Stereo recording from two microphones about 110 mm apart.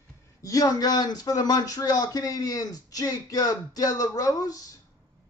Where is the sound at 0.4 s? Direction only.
30° left (ahead or behind).